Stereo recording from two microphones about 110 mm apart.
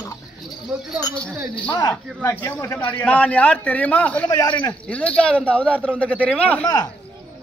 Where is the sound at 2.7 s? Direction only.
15° left (ahead or behind).